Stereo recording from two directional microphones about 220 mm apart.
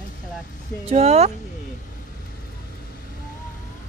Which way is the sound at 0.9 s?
30° right (ahead or behind).